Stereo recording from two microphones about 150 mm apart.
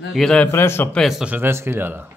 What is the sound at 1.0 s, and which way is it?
Speech, centre (ahead or behind).